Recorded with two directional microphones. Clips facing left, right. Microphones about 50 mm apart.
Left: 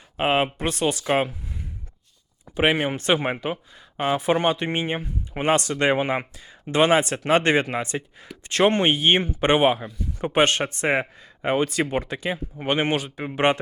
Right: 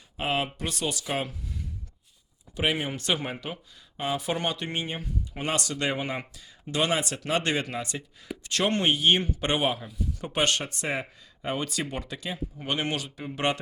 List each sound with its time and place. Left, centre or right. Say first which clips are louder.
0.2 s speech: left 7 dB; left
2.6 s speech: left 7 dB; left